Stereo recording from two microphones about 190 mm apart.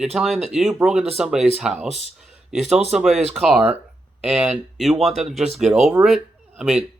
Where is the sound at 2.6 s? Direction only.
35° right (ahead or behind).